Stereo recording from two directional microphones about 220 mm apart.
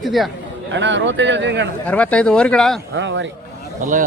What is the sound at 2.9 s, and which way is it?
Speech, 55° right (ahead or behind).